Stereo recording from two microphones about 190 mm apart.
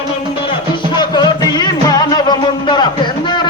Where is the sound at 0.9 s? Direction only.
25° left (ahead or behind).